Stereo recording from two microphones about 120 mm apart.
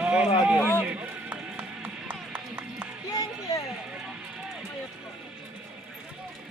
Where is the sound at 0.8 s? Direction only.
10° right (ahead or behind).